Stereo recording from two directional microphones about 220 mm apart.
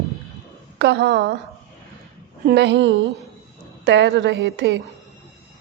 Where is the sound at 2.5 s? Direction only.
50° right (ahead or behind).